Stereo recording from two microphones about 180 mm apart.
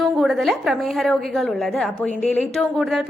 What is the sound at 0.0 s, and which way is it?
A woman's voice, centre (ahead or behind).